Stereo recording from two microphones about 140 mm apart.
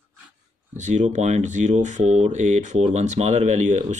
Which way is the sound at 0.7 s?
60° right (ahead or behind).